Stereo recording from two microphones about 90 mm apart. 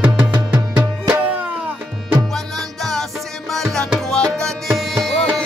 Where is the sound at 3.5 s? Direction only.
Centre (ahead or behind).